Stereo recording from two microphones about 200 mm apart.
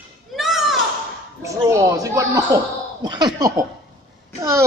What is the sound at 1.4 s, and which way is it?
Laughter, 15° right (ahead or behind).